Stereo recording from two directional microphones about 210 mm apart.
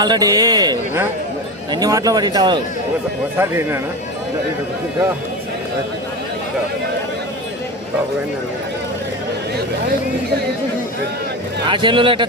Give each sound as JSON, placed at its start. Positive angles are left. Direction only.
{"t": 0.0, "sound": "speech", "side_deg": -20}
{"t": 11.6, "sound": "speech", "side_deg": -25}